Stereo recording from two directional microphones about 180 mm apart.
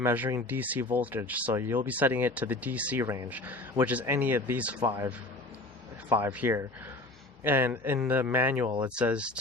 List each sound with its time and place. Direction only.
0.0 s speech: 10° right (ahead or behind)
4.8 s speech: 25° right (ahead or behind)
6.1 s speech: 10° right (ahead or behind)